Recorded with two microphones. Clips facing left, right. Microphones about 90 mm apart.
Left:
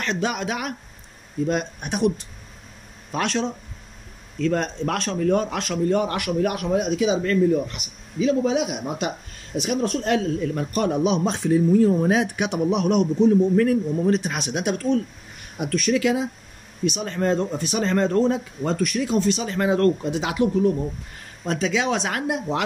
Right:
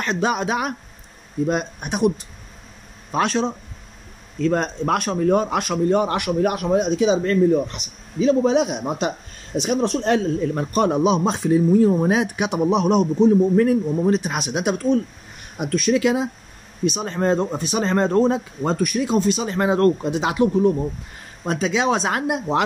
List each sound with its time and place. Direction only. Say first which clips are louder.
0.0 s a man's voice: right 4 dB; 25° right (ahead or behind)